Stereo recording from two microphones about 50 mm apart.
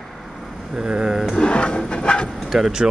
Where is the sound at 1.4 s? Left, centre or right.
Left.